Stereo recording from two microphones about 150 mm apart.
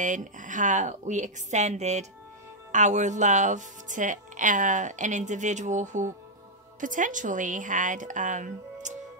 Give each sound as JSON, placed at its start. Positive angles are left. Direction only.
{"t": 0.0, "sound": "a woman's voice", "side_deg": -55}